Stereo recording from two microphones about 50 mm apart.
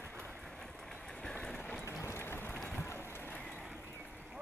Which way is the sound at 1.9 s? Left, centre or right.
Left.